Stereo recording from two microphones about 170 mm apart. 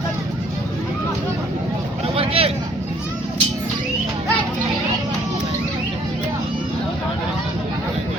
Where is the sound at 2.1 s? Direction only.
35° right (ahead or behind).